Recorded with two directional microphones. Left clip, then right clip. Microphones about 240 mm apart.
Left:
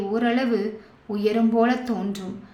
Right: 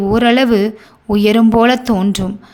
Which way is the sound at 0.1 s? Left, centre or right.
Right.